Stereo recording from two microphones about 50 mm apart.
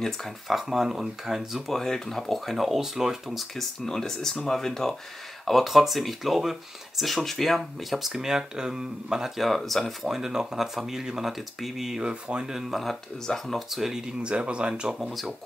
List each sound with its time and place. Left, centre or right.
0.5 s speech: centre
3.5 s speech: centre
9.4 s speech: centre
10.0 s speech: centre
12.7 s speech: centre
13.7 s speech: centre
15.0 s speech: centre